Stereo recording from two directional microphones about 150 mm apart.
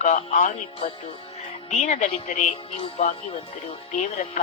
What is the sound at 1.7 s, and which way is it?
Speech, 50° left (ahead or behind).